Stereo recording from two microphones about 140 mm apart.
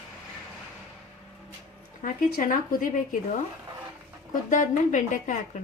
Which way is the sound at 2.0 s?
80° left.